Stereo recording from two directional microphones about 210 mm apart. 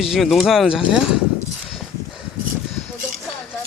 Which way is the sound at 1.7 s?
Centre (ahead or behind).